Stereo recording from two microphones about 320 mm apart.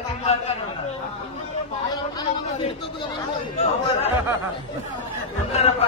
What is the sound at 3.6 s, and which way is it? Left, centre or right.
Speech, centre.